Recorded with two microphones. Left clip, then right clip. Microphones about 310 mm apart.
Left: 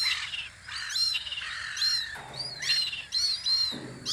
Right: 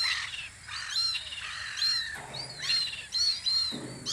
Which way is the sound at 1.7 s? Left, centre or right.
Left.